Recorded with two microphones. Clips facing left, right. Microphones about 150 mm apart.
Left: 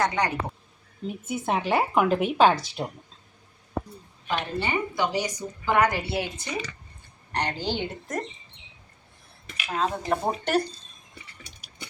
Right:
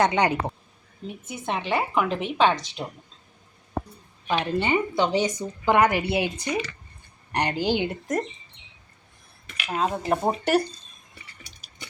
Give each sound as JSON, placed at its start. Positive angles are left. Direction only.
{"t": 0.2, "sound": "speech", "side_deg": -25}
{"t": 1.0, "sound": "a woman's voice", "side_deg": 5}
{"t": 4.3, "sound": "a woman's voice", "side_deg": -20}
{"t": 9.6, "sound": "a woman's voice", "side_deg": -10}